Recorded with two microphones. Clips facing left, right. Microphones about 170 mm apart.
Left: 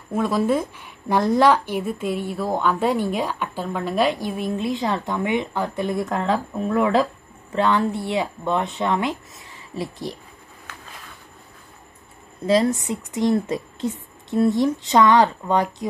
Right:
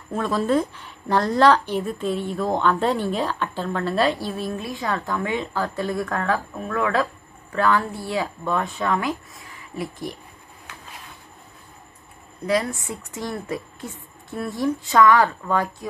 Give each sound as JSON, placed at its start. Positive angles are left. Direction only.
{"t": 0.1, "sound": "a woman's voice", "side_deg": 10}
{"t": 12.4, "sound": "a woman's voice", "side_deg": 25}